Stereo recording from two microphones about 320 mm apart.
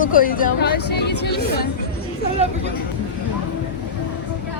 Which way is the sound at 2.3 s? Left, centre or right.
Centre.